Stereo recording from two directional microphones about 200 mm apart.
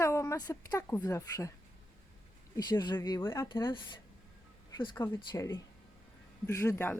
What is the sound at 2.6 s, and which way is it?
Speech, 20° left (ahead or behind).